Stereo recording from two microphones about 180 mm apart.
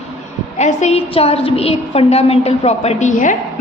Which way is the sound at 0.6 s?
40° left (ahead or behind).